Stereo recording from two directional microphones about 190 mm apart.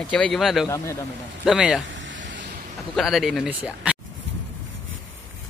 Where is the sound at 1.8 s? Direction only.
75° right (ahead or behind).